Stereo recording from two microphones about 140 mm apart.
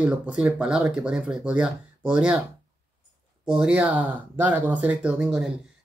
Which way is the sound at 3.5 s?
5° right (ahead or behind).